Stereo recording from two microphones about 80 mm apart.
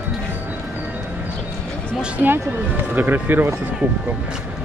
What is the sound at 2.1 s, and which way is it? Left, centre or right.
Speech, right.